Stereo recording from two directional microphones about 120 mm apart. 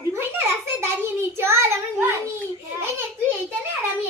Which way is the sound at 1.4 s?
20° right (ahead or behind).